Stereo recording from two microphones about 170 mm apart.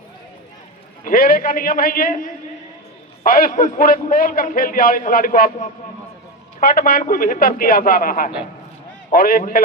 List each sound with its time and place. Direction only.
1.0 s a man's voice: 60° left (ahead or behind)